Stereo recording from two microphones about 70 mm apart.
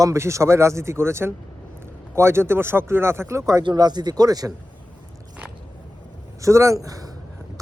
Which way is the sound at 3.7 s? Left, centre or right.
Right.